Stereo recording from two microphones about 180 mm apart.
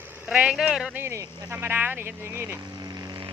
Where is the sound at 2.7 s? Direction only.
20° right (ahead or behind).